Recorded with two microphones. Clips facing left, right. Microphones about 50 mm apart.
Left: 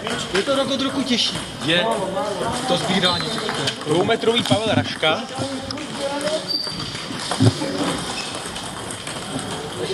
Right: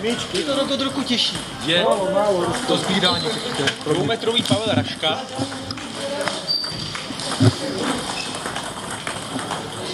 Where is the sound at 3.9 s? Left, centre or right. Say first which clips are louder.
Left 6 dB; centre.